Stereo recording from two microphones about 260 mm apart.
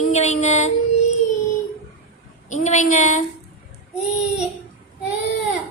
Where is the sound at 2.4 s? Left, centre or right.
Left.